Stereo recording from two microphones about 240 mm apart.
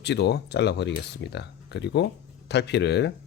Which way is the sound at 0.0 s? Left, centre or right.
Left.